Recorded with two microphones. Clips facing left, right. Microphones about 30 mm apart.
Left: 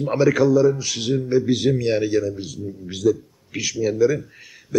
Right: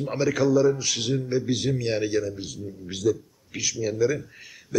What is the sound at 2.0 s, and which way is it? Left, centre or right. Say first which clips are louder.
A man's voice: left 5 dB; centre.